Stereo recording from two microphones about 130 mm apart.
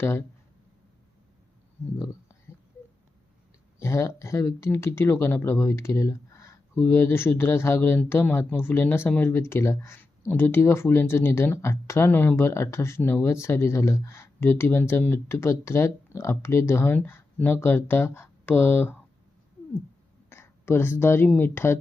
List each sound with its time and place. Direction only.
0.0 s speech: 15° left (ahead or behind)
3.8 s speech: 25° left (ahead or behind)
20.3 s speech: 20° left (ahead or behind)